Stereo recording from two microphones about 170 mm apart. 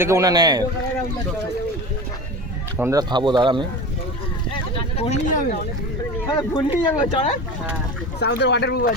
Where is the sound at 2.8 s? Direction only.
20° right (ahead or behind).